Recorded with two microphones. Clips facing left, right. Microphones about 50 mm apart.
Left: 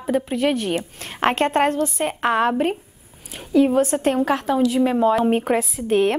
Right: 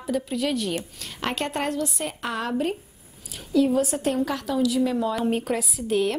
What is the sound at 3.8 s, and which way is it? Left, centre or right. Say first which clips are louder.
A woman's voice: left 5 dB; left.